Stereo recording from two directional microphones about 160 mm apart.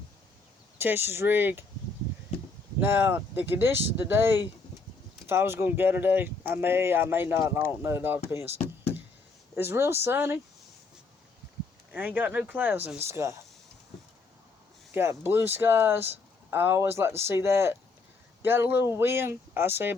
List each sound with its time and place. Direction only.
0.8 s speech: 15° right (ahead or behind)
2.8 s speech: 15° right (ahead or behind)
8.6 s knock: 15° left (ahead or behind)
9.6 s speech: 15° right (ahead or behind)
11.9 s speech: 10° right (ahead or behind)
14.9 s speech: 15° right (ahead or behind)